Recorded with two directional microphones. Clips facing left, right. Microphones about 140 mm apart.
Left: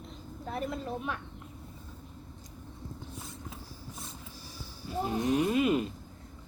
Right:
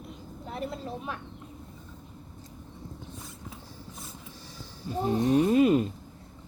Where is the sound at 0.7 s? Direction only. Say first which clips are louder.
Left 1 dB; 35° right (ahead or behind).